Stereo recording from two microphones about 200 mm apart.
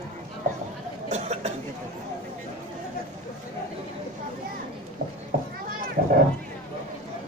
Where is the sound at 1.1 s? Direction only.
35° right (ahead or behind).